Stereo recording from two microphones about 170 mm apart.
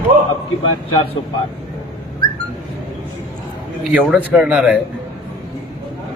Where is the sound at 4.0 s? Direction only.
10° right (ahead or behind).